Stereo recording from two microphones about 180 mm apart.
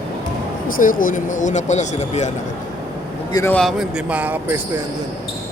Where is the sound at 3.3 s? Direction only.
20° left (ahead or behind).